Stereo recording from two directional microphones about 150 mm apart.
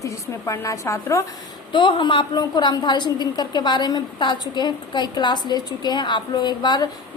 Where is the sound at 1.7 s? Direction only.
30° left (ahead or behind).